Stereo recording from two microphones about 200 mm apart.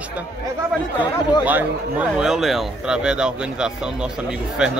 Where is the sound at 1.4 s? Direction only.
5° right (ahead or behind).